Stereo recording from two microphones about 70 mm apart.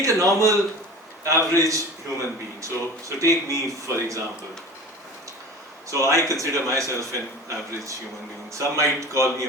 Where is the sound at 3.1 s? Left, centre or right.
Right.